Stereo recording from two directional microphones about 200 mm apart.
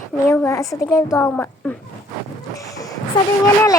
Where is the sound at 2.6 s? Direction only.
15° left (ahead or behind).